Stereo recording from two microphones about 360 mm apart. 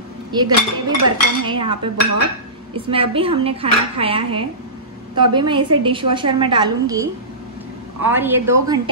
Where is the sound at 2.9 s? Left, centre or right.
Centre.